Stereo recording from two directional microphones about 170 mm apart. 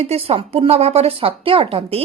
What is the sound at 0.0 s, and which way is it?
A woman's voice, 35° right (ahead or behind).